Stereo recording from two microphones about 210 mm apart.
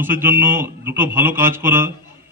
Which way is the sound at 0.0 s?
10° right (ahead or behind).